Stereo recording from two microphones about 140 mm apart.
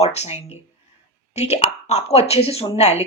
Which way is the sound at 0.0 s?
50° left (ahead or behind).